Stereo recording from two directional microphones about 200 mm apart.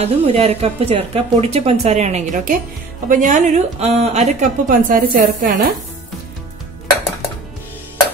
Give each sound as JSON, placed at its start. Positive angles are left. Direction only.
{"t": 0.0, "sound": "speech", "side_deg": -30}